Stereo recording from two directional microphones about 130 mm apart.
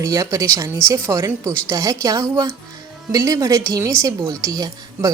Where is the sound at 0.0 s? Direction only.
25° right (ahead or behind).